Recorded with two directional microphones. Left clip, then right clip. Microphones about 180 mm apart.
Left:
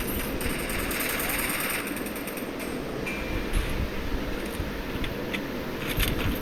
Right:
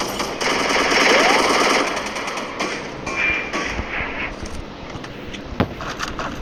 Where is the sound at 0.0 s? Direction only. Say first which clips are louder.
Right 10 dB; 10° left (ahead or behind).